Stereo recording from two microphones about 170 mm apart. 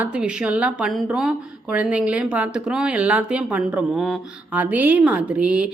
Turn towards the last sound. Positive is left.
turn(degrees=-5)  # may be behind; listen again after turning